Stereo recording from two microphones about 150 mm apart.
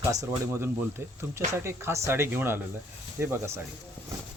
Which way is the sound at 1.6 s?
15° right (ahead or behind).